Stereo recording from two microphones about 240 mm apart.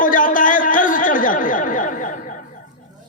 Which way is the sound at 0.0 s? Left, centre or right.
Left.